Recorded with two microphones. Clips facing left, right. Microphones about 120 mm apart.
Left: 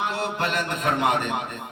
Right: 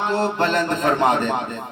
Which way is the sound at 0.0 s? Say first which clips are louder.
Right 6 dB; 30° right (ahead or behind).